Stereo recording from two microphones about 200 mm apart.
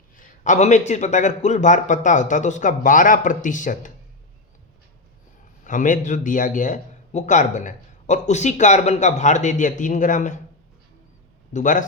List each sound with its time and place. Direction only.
0.2 s a man's voice: 40° left (ahead or behind)
5.6 s a man's voice: 40° left (ahead or behind)
11.5 s a man's voice: 40° left (ahead or behind)